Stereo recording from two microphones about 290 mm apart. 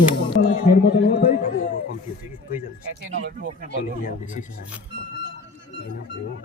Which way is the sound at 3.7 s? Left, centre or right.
Left.